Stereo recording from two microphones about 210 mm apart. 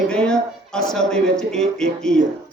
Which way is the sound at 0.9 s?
5° left (ahead or behind).